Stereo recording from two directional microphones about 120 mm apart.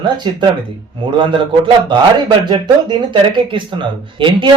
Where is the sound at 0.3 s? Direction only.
40° right (ahead or behind).